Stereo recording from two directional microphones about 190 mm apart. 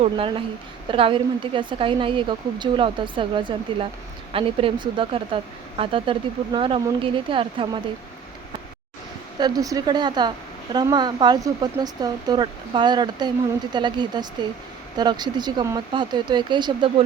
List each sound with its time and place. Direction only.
0.0 s a woman's voice: 30° right (ahead or behind)
9.4 s a woman's voice: 20° right (ahead or behind)